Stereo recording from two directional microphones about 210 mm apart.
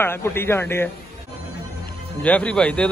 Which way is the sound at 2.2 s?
5° left (ahead or behind).